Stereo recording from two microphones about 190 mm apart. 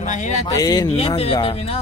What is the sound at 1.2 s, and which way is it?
Speech, 30° left (ahead or behind).